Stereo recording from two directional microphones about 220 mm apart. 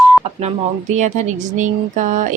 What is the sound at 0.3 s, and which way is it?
Speech, 30° right (ahead or behind).